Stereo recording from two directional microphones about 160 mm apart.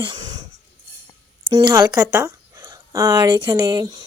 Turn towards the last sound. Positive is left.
turn(degrees=-25)  # may be behind; listen again after turning